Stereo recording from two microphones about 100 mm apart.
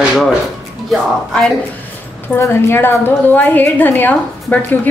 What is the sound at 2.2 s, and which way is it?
A woman's voice, 25° left (ahead or behind).